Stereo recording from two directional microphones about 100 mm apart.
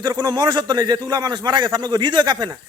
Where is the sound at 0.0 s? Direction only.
40° right (ahead or behind).